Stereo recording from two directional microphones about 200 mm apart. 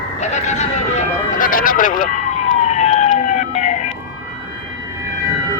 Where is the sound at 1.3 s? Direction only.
45° left (ahead or behind).